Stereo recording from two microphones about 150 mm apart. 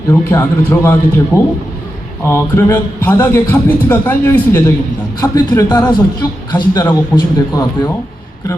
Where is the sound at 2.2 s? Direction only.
15° left (ahead or behind).